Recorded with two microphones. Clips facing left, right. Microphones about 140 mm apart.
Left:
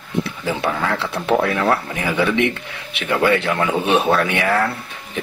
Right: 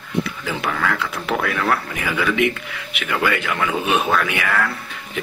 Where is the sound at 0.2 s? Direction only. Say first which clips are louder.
Left 3 dB; 25° left (ahead or behind).